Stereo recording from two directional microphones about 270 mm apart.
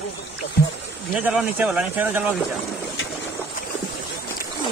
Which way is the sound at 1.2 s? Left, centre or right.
Centre.